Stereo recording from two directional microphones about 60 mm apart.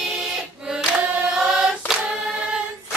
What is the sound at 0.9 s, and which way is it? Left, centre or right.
Choir, right.